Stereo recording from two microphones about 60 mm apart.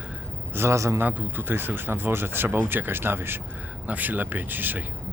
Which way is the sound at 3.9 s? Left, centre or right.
Right.